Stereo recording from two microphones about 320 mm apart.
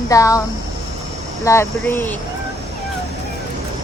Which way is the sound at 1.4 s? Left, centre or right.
Centre.